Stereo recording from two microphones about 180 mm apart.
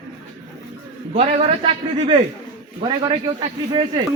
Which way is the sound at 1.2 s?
35° right (ahead or behind).